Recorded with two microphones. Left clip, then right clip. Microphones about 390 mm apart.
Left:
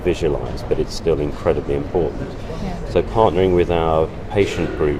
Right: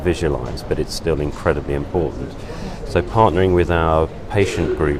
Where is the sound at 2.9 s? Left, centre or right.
Right.